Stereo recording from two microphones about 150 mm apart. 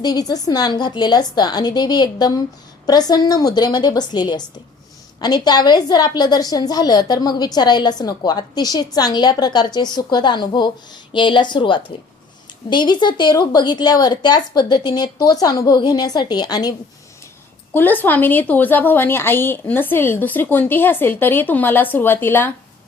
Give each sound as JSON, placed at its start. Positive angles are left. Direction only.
{"t": 0.0, "sound": "a woman's voice", "side_deg": 25}
{"t": 17.7, "sound": "a woman's voice", "side_deg": 10}